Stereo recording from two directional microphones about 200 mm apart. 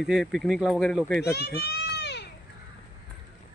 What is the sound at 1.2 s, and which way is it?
A child's voice, 55° left (ahead or behind).